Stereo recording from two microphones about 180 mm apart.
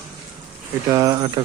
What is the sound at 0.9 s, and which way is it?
Speech, 20° right (ahead or behind).